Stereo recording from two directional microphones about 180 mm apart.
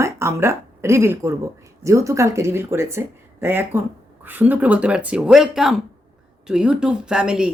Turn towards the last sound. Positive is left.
turn(degrees=-5)  # may be behind; listen again after turning